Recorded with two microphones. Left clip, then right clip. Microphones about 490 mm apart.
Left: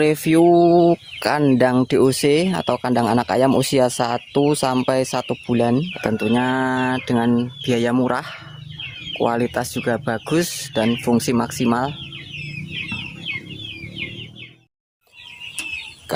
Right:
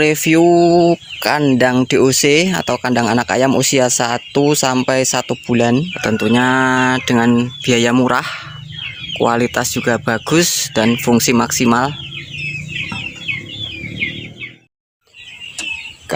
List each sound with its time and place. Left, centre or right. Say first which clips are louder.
0.0 s speech: right 3 dB; left